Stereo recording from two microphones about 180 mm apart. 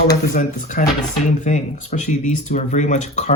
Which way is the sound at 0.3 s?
45° left (ahead or behind).